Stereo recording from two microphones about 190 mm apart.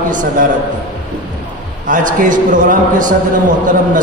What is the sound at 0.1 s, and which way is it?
Speech, 45° right (ahead or behind).